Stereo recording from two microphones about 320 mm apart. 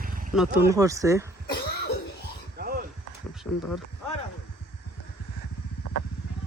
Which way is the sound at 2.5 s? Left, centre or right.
Right.